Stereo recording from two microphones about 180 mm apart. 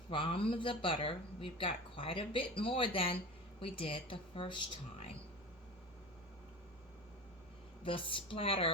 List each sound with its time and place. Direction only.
0.1 s speech: 30° left (ahead or behind)
7.9 s speech: 30° left (ahead or behind)